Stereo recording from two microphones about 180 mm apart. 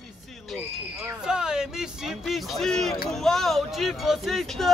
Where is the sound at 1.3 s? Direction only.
5° right (ahead or behind).